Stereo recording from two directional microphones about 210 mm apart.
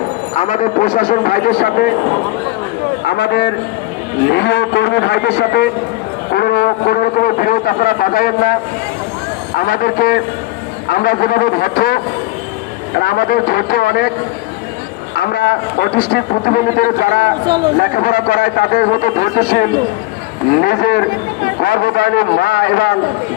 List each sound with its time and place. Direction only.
0.3 s a man's voice: 35° left (ahead or behind)
3.1 s speech: 50° left (ahead or behind)
9.6 s speech: 45° left (ahead or behind)
13.0 s speech: 45° left (ahead or behind)
15.2 s a man's voice: 50° left (ahead or behind)